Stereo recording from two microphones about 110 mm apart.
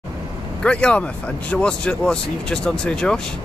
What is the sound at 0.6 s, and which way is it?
Speech, 10° left (ahead or behind).